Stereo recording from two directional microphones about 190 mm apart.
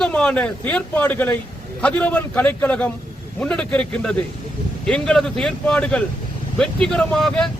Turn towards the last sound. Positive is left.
turn(degrees=5)  # may be behind; listen again after turning